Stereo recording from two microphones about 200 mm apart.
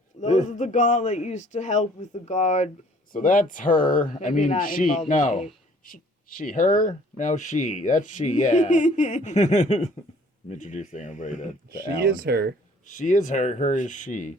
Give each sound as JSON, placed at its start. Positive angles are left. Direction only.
{"t": 0.2, "sound": "speech", "side_deg": 35}
{"t": 12.0, "sound": "speech", "side_deg": -50}
{"t": 12.8, "sound": "speech", "side_deg": 40}